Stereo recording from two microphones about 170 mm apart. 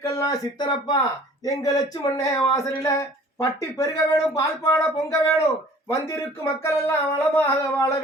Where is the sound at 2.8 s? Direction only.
20° left (ahead or behind).